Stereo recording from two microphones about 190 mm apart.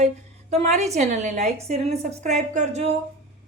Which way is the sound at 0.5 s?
35° right (ahead or behind).